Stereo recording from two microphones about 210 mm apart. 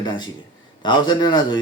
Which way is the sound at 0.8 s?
20° left (ahead or behind).